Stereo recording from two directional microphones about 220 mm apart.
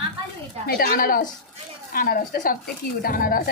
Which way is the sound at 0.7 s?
40° left (ahead or behind).